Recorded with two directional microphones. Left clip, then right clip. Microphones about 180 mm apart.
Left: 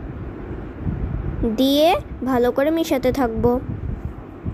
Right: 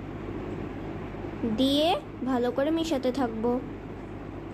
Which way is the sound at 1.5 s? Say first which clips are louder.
Left 8 dB; 40° left (ahead or behind).